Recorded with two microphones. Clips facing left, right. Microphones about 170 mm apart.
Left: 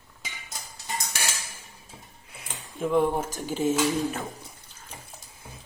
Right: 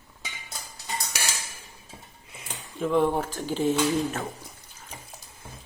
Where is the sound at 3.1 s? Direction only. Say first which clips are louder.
Right 1 dB; 20° left (ahead or behind).